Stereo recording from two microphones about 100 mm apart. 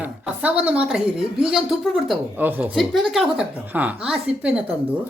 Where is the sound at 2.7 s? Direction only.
Centre (ahead or behind).